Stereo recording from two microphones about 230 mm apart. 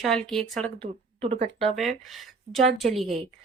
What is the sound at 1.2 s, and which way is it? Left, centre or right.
Speech, right.